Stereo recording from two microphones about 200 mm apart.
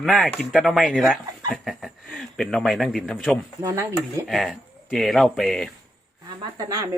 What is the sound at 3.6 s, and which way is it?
Speech, 15° right (ahead or behind).